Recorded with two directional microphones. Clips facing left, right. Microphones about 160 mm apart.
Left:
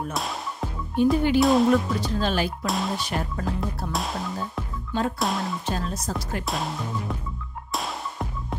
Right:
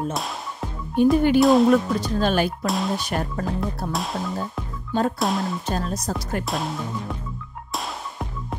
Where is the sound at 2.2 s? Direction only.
55° right (ahead or behind).